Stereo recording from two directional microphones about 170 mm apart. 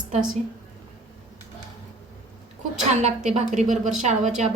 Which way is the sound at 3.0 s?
45° right (ahead or behind).